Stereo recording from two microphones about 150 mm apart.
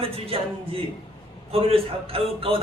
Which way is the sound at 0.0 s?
40° right (ahead or behind).